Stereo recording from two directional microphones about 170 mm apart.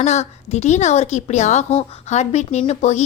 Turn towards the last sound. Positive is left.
turn(degrees=45)  # may be behind; listen again after turning